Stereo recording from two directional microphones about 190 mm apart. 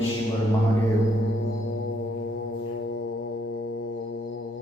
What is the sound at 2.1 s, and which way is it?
Music, 75° left (ahead or behind).